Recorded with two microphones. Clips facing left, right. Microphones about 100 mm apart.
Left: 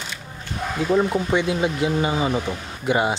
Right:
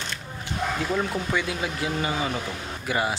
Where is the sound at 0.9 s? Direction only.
20° left (ahead or behind).